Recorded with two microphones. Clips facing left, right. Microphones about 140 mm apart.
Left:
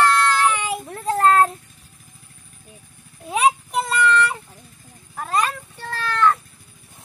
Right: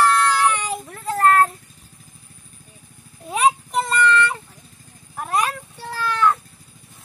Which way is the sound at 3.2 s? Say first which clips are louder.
Even; centre (ahead or behind).